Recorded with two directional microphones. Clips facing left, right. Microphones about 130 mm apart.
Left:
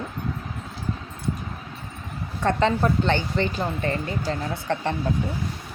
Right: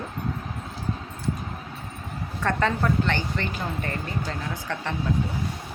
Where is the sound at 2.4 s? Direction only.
25° left (ahead or behind).